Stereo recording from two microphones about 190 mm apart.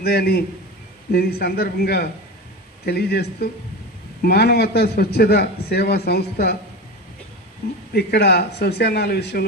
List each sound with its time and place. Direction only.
0.0 s a man's voice: 55° left (ahead or behind)
7.6 s a man's voice: 60° left (ahead or behind)